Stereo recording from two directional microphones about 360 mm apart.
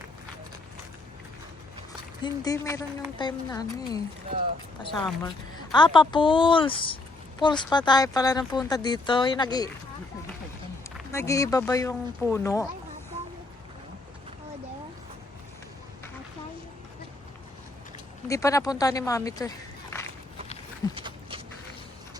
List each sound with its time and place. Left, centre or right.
2.2 s speech: centre
4.3 s speech: right
4.8 s speech: centre
10.9 s speech: centre
18.3 s speech: centre
20.9 s a sound: centre